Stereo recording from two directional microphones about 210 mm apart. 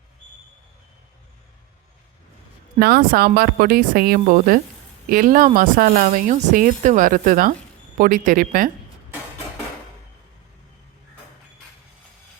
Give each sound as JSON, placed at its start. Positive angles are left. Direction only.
{"t": 2.7, "sound": "a woman's voice", "side_deg": -45}